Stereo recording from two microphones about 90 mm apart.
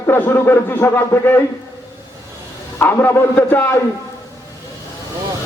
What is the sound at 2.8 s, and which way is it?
A man's voice, 25° left (ahead or behind).